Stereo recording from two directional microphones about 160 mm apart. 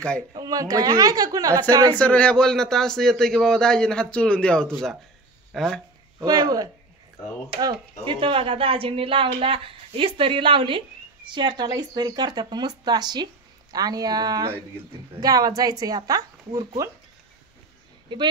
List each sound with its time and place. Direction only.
0.3 s speech: 25° right (ahead or behind)
2.0 s a man's voice: 10° left (ahead or behind)
6.1 s a woman's voice: 25° right (ahead or behind)
18.1 s speech: 30° right (ahead or behind)